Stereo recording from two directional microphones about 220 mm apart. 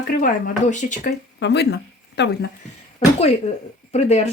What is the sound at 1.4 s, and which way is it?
Speech, 50° left (ahead or behind).